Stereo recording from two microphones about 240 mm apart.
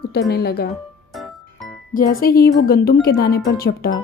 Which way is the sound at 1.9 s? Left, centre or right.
Left.